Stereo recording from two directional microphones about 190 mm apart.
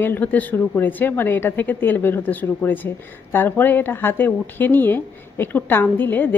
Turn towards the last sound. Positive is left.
turn(degrees=10)  # may be behind; listen again after turning